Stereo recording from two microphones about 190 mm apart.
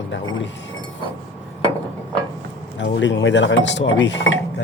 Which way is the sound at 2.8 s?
75° left (ahead or behind).